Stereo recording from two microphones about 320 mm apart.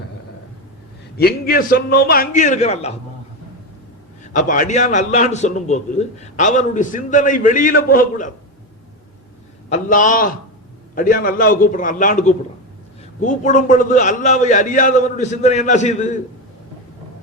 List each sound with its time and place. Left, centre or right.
1.1 s a man's voice: left
4.3 s a man's voice: left
9.6 s a man's voice: left